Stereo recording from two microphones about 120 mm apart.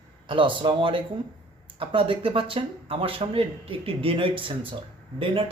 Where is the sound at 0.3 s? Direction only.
45° right (ahead or behind).